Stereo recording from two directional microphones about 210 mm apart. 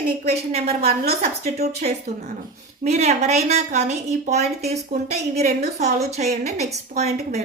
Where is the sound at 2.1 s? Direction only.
50° right (ahead or behind).